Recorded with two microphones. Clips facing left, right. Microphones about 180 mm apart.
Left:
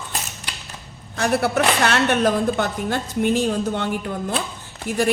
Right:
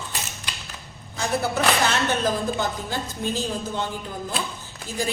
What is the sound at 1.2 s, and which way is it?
A woman's voice, 75° left (ahead or behind).